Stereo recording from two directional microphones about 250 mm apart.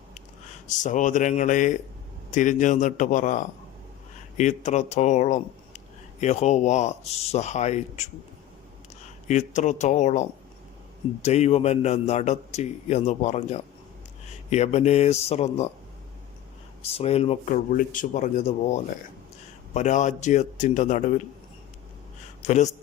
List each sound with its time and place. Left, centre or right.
0.7 s a man's voice: left
9.2 s speech: left
16.8 s speech: left
22.4 s speech: left